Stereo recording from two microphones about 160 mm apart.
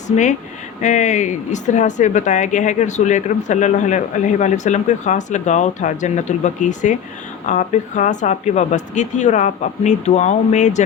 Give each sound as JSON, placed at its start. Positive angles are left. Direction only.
{"t": 0.8, "sound": "speech", "side_deg": 50}